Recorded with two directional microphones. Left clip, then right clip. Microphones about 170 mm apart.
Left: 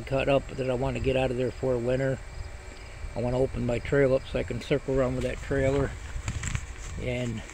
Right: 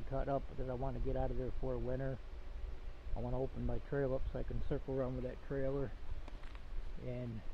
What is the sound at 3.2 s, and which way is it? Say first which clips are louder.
Speech: left 14 dB; 25° left (ahead or behind).